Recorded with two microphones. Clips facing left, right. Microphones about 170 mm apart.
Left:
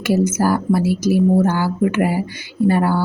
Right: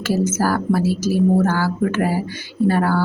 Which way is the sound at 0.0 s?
10° left (ahead or behind).